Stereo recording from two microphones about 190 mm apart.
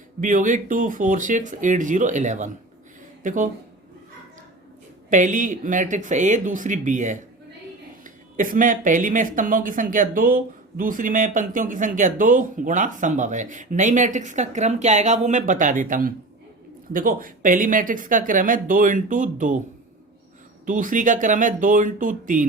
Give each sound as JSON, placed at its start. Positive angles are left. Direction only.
{"t": 0.2, "sound": "speech", "side_deg": -45}
{"t": 5.0, "sound": "speech", "side_deg": -40}
{"t": 20.7, "sound": "speech", "side_deg": -45}